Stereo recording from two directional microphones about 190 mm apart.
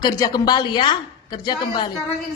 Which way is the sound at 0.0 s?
20° left (ahead or behind).